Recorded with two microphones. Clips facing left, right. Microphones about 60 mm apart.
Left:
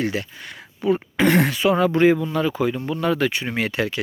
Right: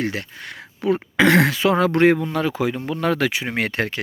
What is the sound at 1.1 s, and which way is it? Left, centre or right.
Speech, right.